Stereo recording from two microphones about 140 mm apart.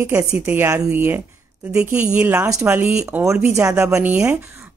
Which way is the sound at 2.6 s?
10° right (ahead or behind).